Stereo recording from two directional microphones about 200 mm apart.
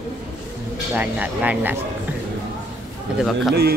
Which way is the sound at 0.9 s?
10° right (ahead or behind).